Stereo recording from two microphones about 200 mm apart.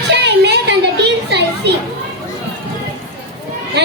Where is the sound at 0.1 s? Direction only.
60° right (ahead or behind).